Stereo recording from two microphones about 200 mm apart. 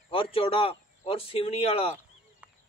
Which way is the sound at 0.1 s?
25° left (ahead or behind).